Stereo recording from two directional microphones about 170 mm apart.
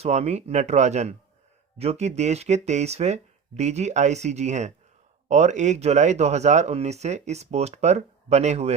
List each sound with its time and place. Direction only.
0.0 s speech: 40° right (ahead or behind)